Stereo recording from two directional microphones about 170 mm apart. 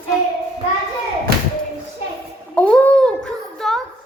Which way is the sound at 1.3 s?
65° right (ahead or behind).